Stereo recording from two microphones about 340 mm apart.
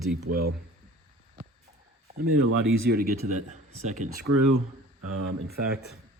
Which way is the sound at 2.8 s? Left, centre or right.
Right.